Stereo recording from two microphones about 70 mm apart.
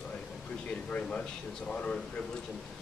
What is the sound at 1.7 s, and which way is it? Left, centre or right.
Speech, centre.